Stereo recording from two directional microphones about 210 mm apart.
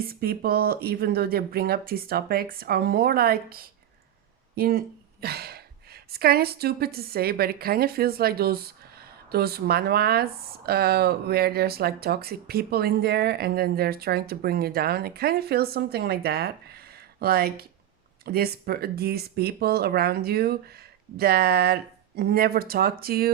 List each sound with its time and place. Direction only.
0.0 s a woman's voice: 45° right (ahead or behind)